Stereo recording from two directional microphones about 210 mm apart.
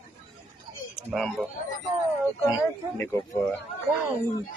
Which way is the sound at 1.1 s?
Centre (ahead or behind).